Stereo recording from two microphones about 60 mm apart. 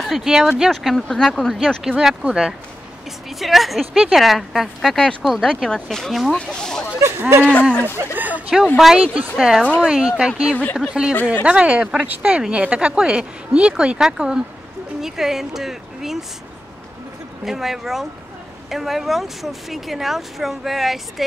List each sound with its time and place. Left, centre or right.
0.0 s speech: centre
0.3 s speech: centre
0.7 s speech: centre
1.9 s speech: centre
3.3 s speech: centre
6.3 s speech: centre
7.0 s speech: right
8.0 s speech: right
9.4 s speech: centre
10.5 s speech: left
10.8 s speech: centre
17.5 s speech: centre